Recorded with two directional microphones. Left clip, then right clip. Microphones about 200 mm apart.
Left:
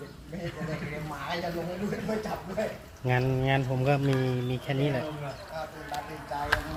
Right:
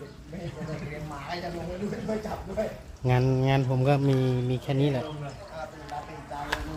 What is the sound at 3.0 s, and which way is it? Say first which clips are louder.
Speech: right 2 dB; 25° right (ahead or behind).